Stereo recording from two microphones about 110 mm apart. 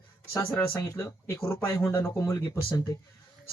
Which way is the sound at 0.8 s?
25° left (ahead or behind).